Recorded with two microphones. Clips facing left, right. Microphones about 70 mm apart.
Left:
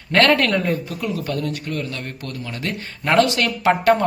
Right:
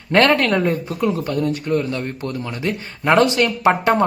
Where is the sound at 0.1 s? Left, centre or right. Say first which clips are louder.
Right 1 dB; right.